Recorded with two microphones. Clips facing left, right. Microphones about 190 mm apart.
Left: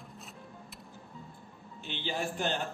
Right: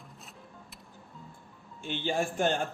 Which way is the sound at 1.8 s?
45° right (ahead or behind).